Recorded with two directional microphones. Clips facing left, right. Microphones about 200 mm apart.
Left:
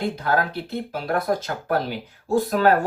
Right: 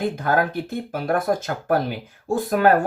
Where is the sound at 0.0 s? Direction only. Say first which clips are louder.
Right 2 dB; 50° right (ahead or behind).